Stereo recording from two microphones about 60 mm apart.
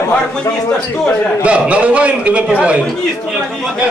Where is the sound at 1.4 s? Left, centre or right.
Right.